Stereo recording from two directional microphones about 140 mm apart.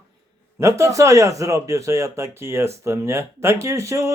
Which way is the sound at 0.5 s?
20° right (ahead or behind).